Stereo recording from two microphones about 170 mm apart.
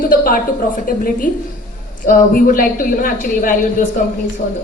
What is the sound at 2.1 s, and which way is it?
A woman's voice, 55° left (ahead or behind).